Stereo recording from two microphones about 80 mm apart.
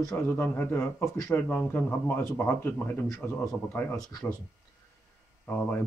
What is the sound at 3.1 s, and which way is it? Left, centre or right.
Speech, left.